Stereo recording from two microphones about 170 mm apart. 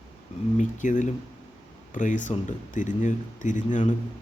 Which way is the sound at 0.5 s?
45° left (ahead or behind).